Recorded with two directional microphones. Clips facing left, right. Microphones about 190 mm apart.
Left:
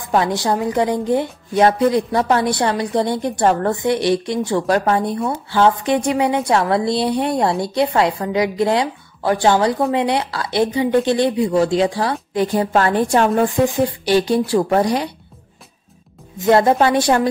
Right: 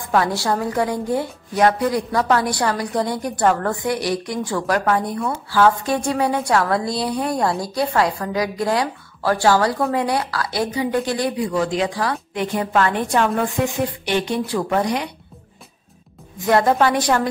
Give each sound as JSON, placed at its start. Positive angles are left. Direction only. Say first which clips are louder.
{"t": 0.1, "sound": "a woman's voice", "louder": "left 2 dB", "side_deg": 20}
{"t": 16.4, "sound": "a woman's voice", "louder": "left 3 dB", "side_deg": 25}